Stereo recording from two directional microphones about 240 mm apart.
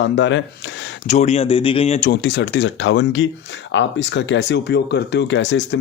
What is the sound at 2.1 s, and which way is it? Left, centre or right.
Speech, left.